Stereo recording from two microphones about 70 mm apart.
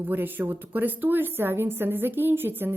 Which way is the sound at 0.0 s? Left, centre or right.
Right.